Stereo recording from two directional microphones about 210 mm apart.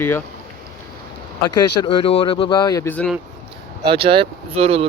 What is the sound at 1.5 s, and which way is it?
Speech, 20° left (ahead or behind).